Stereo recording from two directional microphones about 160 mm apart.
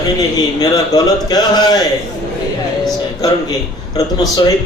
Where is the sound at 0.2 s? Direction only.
25° left (ahead or behind).